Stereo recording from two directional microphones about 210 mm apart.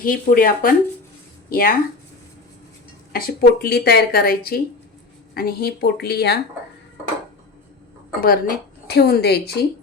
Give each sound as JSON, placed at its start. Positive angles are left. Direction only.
{"t": 0.0, "sound": "speech", "side_deg": 40}
{"t": 3.1, "sound": "speech", "side_deg": 45}
{"t": 8.2, "sound": "speech", "side_deg": 45}